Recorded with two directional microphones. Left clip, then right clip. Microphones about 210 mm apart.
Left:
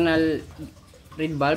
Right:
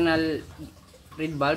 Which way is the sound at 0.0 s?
30° left (ahead or behind).